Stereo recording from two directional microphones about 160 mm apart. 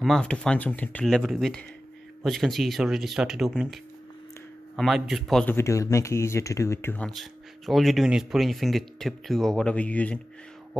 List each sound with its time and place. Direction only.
0.0 s speech: 5° left (ahead or behind)
5.5 s speech: 20° left (ahead or behind)
7.1 s speech: centre (ahead or behind)